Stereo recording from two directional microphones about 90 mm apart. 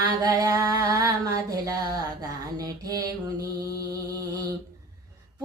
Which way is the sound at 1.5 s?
40° right (ahead or behind).